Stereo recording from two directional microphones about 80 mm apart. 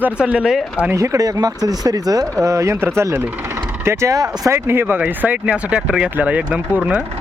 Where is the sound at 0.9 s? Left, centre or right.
Right.